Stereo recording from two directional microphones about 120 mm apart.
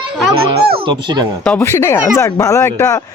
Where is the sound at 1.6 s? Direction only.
20° left (ahead or behind).